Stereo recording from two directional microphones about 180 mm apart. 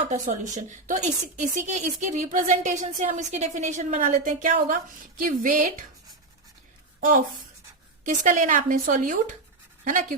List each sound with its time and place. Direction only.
0.1 s a woman's voice: 45° right (ahead or behind)
7.0 s a woman's voice: 50° right (ahead or behind)